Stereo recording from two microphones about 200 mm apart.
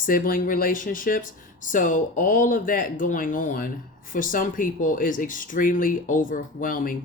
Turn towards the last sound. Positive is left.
turn(degrees=45)  # may be behind; listen again after turning